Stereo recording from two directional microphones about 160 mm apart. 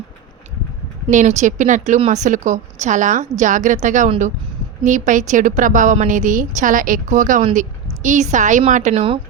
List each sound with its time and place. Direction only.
1.1 s a woman's voice: 50° right (ahead or behind)